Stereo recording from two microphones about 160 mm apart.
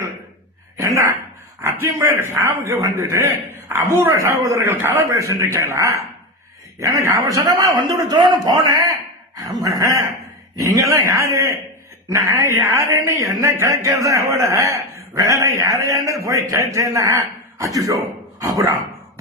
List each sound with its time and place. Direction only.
1.6 s a man's voice: 15° right (ahead or behind)